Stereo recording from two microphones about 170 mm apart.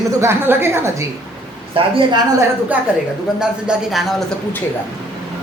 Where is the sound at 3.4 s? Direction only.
5° right (ahead or behind).